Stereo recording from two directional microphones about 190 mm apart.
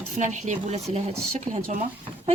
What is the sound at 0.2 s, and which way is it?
Speech, 40° right (ahead or behind).